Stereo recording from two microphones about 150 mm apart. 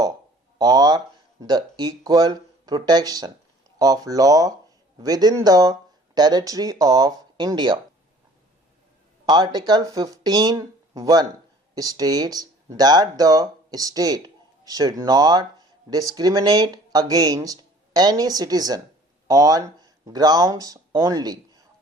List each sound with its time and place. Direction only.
0.6 s speech: 25° right (ahead or behind)
9.2 s speech: 25° right (ahead or behind)